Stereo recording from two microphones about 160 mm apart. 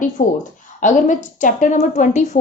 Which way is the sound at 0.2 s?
50° left (ahead or behind).